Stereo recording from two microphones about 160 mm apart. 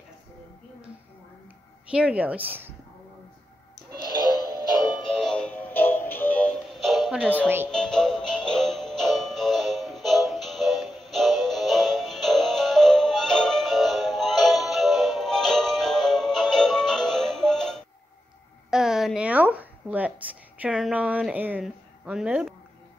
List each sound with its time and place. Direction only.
1.9 s speech: 5° right (ahead or behind)
4.8 s music: 30° left (ahead or behind)
5.2 s music: 5° left (ahead or behind)
7.4 s speech: 15° right (ahead or behind)
7.7 s music: 5° left (ahead or behind)
18.7 s a sound: 5° right (ahead or behind)